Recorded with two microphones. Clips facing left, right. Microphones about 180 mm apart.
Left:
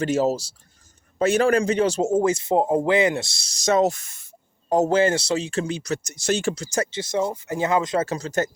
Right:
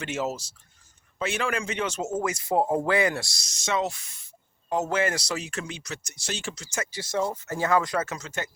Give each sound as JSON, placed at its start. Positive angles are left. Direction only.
{"t": 0.0, "sound": "speech", "side_deg": 35}
{"t": 4.7, "sound": "speech", "side_deg": 35}
{"t": 6.9, "sound": "speech", "side_deg": 20}